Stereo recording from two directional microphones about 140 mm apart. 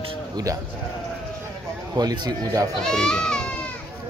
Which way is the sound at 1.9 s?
30° right (ahead or behind).